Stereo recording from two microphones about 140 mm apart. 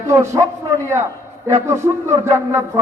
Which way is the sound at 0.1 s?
20° right (ahead or behind).